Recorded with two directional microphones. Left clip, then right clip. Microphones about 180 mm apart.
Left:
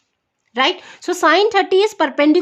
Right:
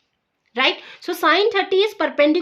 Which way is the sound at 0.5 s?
45° left (ahead or behind).